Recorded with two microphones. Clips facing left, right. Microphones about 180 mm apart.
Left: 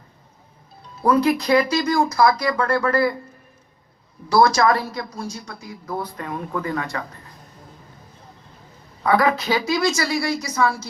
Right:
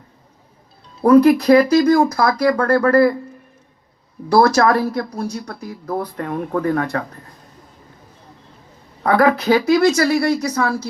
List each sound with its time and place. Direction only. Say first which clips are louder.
1.0 s speech: right 8 dB; 60° right (ahead or behind)
4.3 s speech: right 3 dB; 60° right (ahead or behind)
9.0 s speech: right 4 dB; 60° right (ahead or behind)